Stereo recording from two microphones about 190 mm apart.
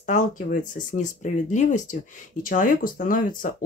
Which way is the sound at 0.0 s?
40° left (ahead or behind).